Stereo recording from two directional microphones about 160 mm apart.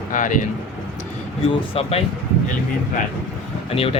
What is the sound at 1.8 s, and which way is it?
Speech, 40° left (ahead or behind).